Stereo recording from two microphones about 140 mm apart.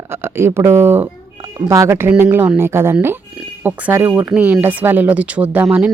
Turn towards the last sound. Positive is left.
turn(degrees=-10)  # may be behind; listen again after turning